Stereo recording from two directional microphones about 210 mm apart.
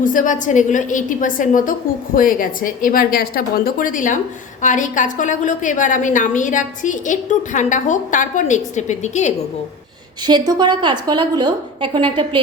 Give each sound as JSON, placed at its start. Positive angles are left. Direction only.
{"t": 0.0, "sound": "a woman's voice", "side_deg": 40}
{"t": 10.2, "sound": "a woman's voice", "side_deg": -20}